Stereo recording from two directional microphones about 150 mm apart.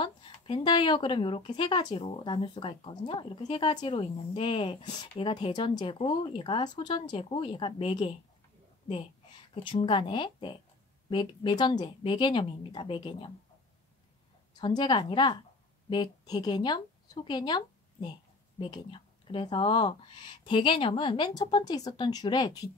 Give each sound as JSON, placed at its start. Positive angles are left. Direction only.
{"t": 0.0, "sound": "speech", "side_deg": 35}
{"t": 2.0, "sound": "speech", "side_deg": 40}
{"t": 9.6, "sound": "speech", "side_deg": 35}
{"t": 14.6, "sound": "speech", "side_deg": 30}